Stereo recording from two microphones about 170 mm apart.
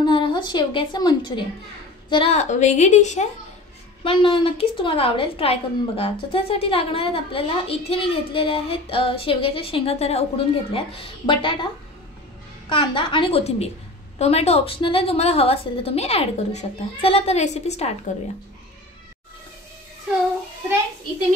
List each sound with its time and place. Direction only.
0.0 s a woman's voice: 30° left (ahead or behind); by 3.3 s 45° left (ahead or behind)
4.0 s a woman's voice: 30° left (ahead or behind)
12.6 s a woman's voice: 30° left (ahead or behind)